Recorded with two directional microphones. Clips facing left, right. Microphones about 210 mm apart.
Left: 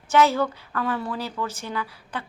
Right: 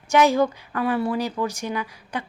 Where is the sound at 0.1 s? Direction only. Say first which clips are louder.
Right 2 dB; 15° right (ahead or behind).